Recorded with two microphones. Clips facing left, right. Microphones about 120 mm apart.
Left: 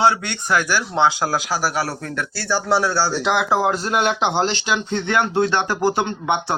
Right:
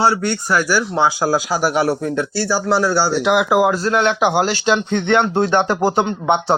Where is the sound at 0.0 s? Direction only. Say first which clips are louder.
Right 2 dB; 5° right (ahead or behind).